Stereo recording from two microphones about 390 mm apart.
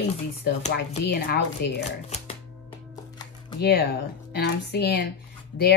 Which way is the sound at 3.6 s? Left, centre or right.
Left.